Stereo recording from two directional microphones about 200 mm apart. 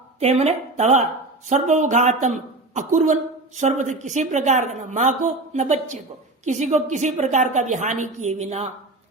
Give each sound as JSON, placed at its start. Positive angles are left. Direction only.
{"t": 0.2, "sound": "a woman's voice", "side_deg": -30}